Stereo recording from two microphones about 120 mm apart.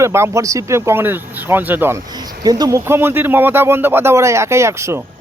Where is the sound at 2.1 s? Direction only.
35° right (ahead or behind).